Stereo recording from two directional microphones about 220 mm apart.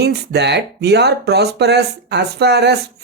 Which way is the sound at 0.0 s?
50° right (ahead or behind).